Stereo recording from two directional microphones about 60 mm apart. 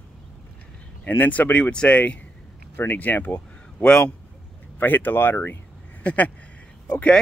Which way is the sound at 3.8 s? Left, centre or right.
Centre.